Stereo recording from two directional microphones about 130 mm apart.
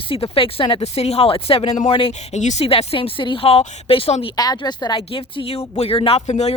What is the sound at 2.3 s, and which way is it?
Speech, 60° left (ahead or behind).